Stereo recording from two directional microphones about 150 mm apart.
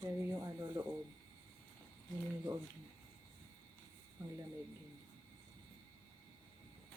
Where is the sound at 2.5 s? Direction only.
20° right (ahead or behind).